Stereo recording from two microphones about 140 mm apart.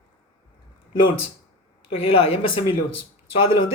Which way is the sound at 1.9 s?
45° left (ahead or behind).